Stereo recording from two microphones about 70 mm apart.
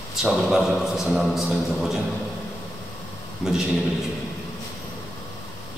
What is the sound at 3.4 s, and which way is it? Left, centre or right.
Speech, centre.